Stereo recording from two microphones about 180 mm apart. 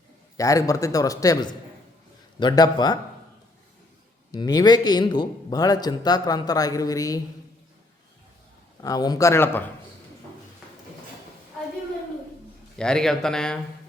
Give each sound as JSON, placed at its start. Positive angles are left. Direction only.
{"t": 0.3, "sound": "a man's voice", "side_deg": 20}
{"t": 4.3, "sound": "a man's voice", "side_deg": 20}
{"t": 8.8, "sound": "a man's voice", "side_deg": 20}
{"t": 12.7, "sound": "speech", "side_deg": 5}